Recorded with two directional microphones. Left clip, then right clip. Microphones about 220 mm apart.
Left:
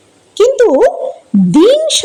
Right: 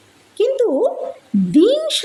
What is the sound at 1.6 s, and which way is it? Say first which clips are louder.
Speech: left 8 dB; 25° left (ahead or behind).